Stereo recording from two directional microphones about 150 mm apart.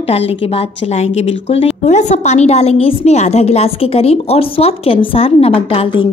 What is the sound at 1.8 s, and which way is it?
A woman's voice, 50° left (ahead or behind).